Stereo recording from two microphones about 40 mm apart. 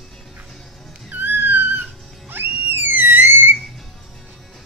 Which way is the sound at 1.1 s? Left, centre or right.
Right.